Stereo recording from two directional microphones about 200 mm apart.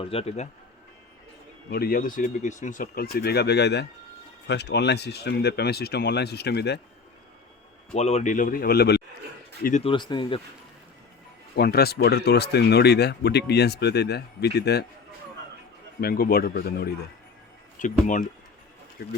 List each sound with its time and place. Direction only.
0.0 s speech: 30° left (ahead or behind)
1.7 s speech: 50° left (ahead or behind)
7.9 s speech: 35° left (ahead or behind); by 9.0 s 50° left (ahead or behind)
9.8 s speech: 25° left (ahead or behind)
11.5 s speech: 50° left (ahead or behind)
16.0 s speech: 50° left (ahead or behind)
18.0 s speech: 40° left (ahead or behind)
19.0 s speech: 55° left (ahead or behind)